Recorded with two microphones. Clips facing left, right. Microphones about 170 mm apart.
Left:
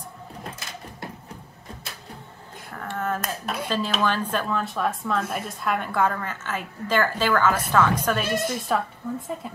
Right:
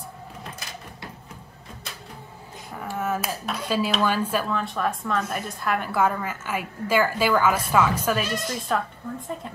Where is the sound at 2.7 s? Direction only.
10° right (ahead or behind).